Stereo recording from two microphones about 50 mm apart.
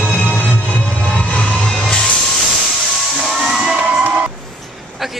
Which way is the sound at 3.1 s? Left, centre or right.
Centre.